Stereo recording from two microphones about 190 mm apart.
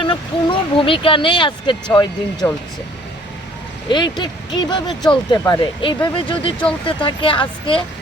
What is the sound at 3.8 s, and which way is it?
Speech, 25° left (ahead or behind).